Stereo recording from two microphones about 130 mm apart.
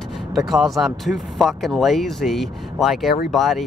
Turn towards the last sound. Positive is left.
turn(degrees=0)  # may be behind; listen again after turning